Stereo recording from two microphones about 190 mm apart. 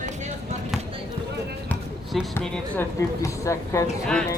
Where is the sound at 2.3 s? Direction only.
10° left (ahead or behind).